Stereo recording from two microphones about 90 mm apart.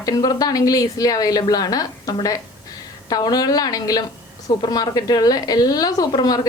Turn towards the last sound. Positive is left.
turn(degrees=50)  # may be behind; listen again after turning